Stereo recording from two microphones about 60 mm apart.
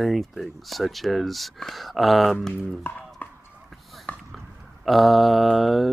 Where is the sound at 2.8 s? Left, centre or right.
Left.